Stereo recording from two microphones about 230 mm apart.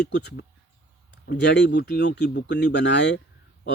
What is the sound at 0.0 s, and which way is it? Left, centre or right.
Speech, left.